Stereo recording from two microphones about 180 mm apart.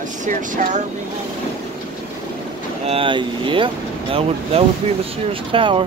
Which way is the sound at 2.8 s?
30° right (ahead or behind).